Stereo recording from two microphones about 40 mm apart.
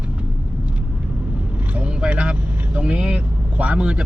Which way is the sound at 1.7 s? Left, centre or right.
Right.